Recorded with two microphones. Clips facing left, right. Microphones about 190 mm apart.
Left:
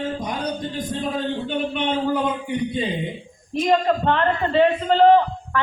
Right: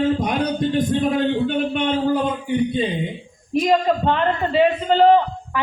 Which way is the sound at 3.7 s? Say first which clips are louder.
Even; 5° right (ahead or behind).